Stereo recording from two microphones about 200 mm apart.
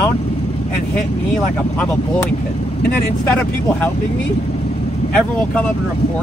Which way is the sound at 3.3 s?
10° left (ahead or behind).